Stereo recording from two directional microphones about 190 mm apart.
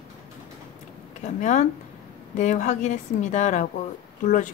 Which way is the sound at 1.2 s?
40° left (ahead or behind).